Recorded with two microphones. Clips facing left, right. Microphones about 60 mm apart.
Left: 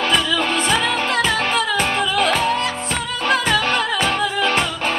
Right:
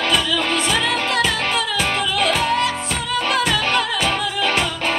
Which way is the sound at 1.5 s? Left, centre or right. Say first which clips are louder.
Left 2 dB; left.